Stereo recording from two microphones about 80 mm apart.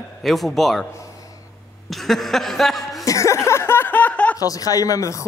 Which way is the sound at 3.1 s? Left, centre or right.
Left.